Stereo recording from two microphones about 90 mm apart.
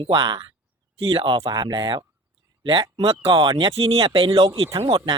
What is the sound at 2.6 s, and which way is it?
Speech, 65° right (ahead or behind).